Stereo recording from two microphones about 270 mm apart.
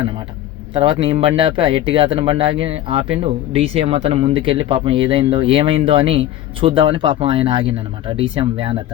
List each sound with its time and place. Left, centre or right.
0.7 s a man's voice: centre